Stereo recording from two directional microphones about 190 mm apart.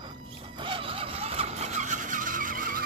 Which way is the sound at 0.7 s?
30° right (ahead or behind).